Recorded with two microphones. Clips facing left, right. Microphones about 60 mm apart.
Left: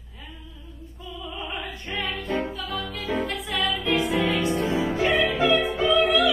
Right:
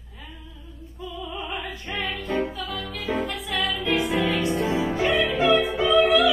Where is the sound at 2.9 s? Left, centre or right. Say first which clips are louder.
Right 2 dB; right.